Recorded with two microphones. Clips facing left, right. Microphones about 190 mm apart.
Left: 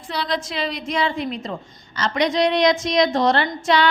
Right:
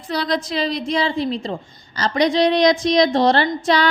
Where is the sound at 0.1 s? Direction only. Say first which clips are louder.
Right 4 dB; 40° right (ahead or behind).